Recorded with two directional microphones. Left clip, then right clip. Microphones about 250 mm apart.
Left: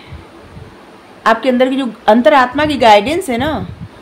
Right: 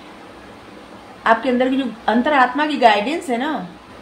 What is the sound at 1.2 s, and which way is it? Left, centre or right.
A woman's voice, left.